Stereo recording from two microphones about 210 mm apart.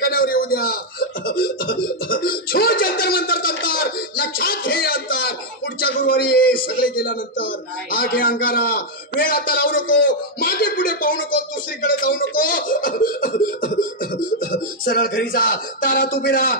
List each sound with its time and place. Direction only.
0.0 s chuckle: 45° left (ahead or behind)
5.8 s a sound: 45° left (ahead or behind)
14.5 s music: 40° left (ahead or behind)
15.3 s a man's voice: 40° left (ahead or behind)